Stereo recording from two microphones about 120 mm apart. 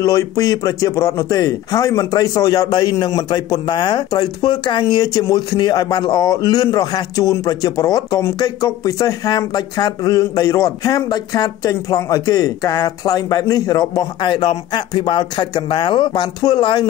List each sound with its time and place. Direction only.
0.0 s speech: 25° left (ahead or behind)